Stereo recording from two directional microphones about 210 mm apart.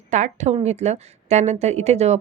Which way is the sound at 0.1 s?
35° right (ahead or behind).